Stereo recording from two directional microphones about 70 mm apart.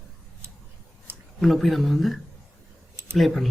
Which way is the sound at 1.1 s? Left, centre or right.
Right.